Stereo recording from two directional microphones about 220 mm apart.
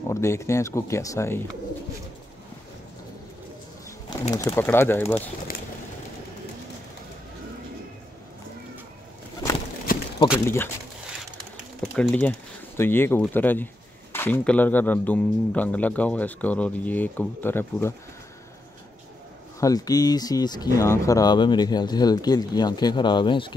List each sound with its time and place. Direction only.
0.1 s speech: 10° left (ahead or behind)
4.3 s speech: 15° left (ahead or behind)
9.9 s a sound: 40° left (ahead or behind)
10.4 s speech: 10° left (ahead or behind)
11.8 s speech: 5° left (ahead or behind)
19.6 s speech: 15° left (ahead or behind)